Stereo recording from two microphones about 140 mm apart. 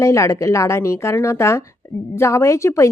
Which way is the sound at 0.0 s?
20° left (ahead or behind).